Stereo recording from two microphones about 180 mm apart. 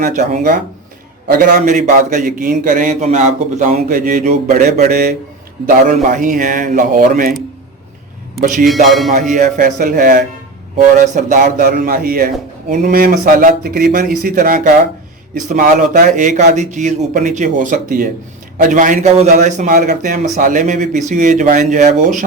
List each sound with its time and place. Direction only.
0.0 s a man's voice: 50° right (ahead or behind)
8.4 s a man's voice: 50° right (ahead or behind)
8.6 s speech: centre (ahead or behind)
9.3 s a man's voice: 45° right (ahead or behind)
11.4 s a man's voice: 55° right (ahead or behind)